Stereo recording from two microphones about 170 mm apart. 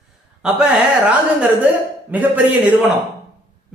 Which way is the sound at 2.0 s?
10° right (ahead or behind).